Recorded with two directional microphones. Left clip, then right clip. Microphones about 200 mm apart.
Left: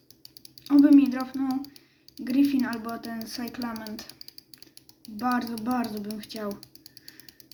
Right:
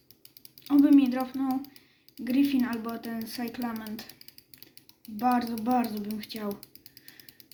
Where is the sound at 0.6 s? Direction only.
10° right (ahead or behind).